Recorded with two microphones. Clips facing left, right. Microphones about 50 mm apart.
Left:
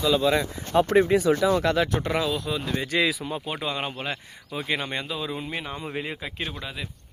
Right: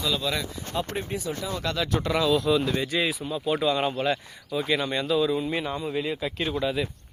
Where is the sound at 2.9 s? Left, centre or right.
Left.